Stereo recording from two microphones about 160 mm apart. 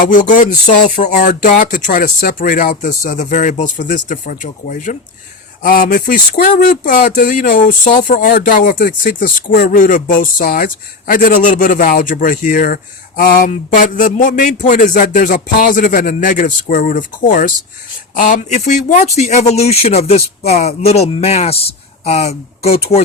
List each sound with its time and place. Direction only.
0.1 s speech: 55° left (ahead or behind); by 23.0 s 40° left (ahead or behind)